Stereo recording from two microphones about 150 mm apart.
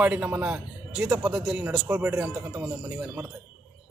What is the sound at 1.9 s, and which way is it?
Speech, 20° right (ahead or behind).